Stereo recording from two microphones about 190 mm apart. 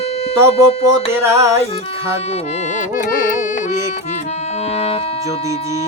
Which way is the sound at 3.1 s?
45° left (ahead or behind).